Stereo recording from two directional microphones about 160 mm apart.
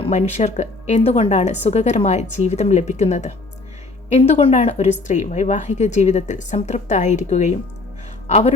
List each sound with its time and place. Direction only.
0.0 s speech: 45° left (ahead or behind)